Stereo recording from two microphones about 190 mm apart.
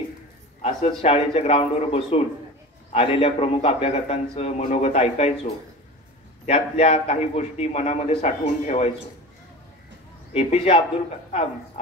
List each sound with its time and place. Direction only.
0.6 s a man's voice: 30° left (ahead or behind)
10.3 s a man's voice: 30° left (ahead or behind)